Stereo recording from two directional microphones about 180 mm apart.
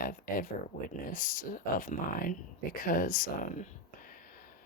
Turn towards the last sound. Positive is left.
turn(degrees=45)  # may be behind; listen again after turning